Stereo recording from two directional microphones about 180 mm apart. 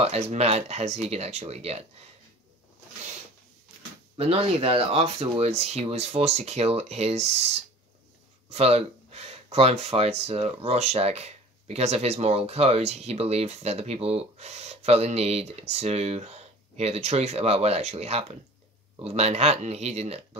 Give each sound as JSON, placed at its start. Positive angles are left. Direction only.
{"t": 0.0, "sound": "speech", "side_deg": -35}
{"t": 4.2, "sound": "speech", "side_deg": -35}